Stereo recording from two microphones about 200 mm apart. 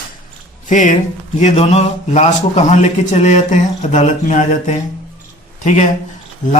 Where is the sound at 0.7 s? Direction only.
40° left (ahead or behind).